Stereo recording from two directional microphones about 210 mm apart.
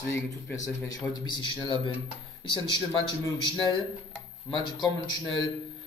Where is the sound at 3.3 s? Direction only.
20° left (ahead or behind).